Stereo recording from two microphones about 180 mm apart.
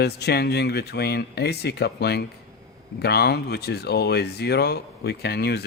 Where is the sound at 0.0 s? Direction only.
65° left (ahead or behind).